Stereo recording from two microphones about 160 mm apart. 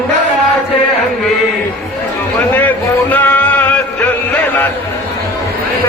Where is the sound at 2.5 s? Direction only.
10° left (ahead or behind).